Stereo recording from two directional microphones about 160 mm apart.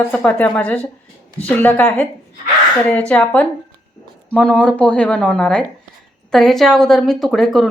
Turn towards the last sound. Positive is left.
turn(degrees=0)  # may be behind; listen again after turning